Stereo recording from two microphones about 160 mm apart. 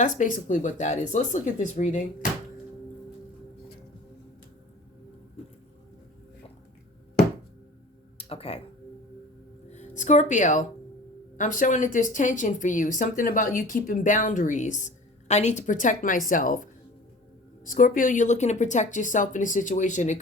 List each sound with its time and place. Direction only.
0.0 s a woman's voice: 55° left (ahead or behind)
8.2 s music: 40° left (ahead or behind)
9.6 s a woman's voice: 45° left (ahead or behind)
17.7 s a woman's voice: 55° left (ahead or behind)